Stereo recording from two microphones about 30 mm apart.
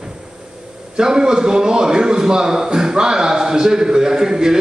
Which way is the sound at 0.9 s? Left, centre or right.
Right.